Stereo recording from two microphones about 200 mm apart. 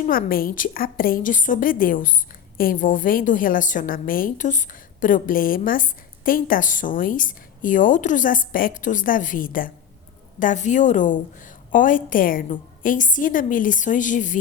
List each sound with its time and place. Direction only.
0.0 s a woman's voice: 45° left (ahead or behind)